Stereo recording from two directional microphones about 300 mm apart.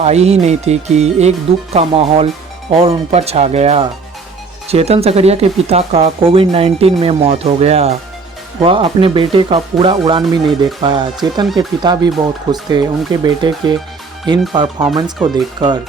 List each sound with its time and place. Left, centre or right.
0.0 s speech: right